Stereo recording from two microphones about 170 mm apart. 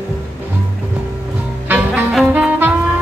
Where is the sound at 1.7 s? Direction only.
10° right (ahead or behind).